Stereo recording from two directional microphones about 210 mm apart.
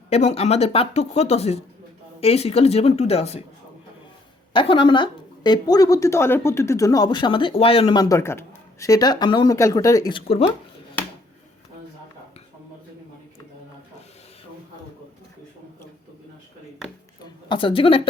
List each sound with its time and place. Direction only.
0.1 s a woman's voice: 30° left (ahead or behind)
4.5 s a woman's voice: 25° left (ahead or behind)
17.5 s a woman's voice: 25° left (ahead or behind)